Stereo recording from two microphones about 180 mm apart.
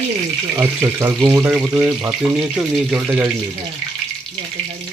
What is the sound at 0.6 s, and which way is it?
Speech, 15° right (ahead or behind).